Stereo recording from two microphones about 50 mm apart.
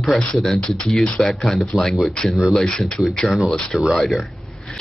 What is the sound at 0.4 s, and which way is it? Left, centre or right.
Speech, centre.